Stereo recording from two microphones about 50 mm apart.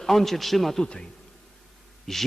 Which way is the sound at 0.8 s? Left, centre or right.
Centre.